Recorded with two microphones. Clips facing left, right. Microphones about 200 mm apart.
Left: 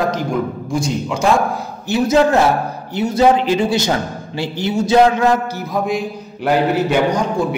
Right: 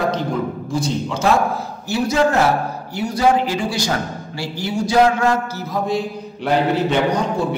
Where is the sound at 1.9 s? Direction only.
20° left (ahead or behind).